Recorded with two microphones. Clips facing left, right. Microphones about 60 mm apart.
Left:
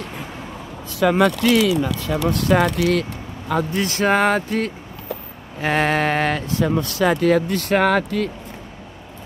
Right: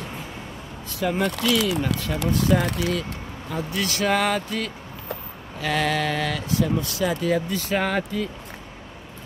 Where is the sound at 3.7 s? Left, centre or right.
Left.